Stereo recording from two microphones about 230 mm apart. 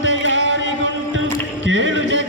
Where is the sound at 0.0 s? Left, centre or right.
Right.